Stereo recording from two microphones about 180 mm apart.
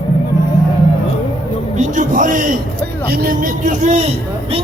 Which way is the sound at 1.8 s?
45° right (ahead or behind).